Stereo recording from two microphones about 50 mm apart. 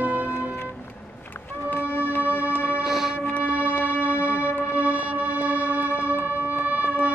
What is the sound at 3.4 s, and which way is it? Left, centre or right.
Music, right.